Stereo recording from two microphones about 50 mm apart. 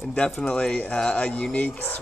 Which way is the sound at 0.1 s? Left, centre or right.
Centre.